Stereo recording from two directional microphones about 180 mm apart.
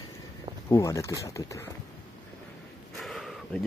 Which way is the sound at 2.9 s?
Centre (ahead or behind).